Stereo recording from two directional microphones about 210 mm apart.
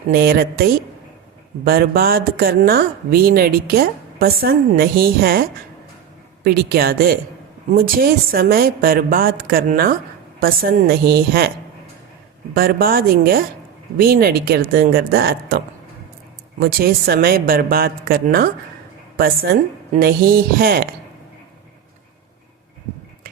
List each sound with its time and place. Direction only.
0.1 s speech: 50° right (ahead or behind)
12.5 s a woman's voice: 45° right (ahead or behind)